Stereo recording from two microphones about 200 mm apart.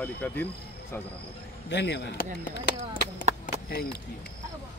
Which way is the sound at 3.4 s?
50° left (ahead or behind).